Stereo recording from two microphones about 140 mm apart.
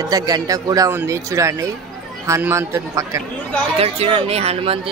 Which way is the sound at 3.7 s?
45° right (ahead or behind).